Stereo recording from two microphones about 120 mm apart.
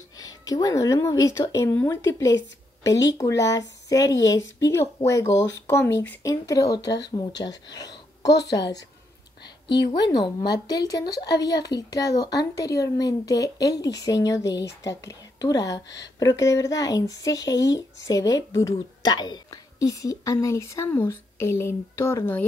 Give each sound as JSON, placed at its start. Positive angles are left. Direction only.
{"t": 0.2, "sound": "speech", "side_deg": 30}
{"t": 9.9, "sound": "speech", "side_deg": 35}